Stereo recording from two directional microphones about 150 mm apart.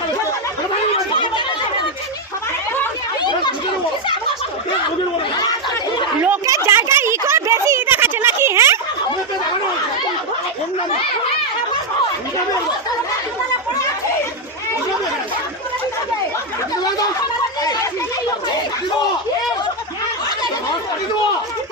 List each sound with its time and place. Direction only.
0.9 s chatter: 35° left (ahead or behind)
3.2 s chatter: 30° left (ahead or behind)
6.2 s a sound: 20° right (ahead or behind)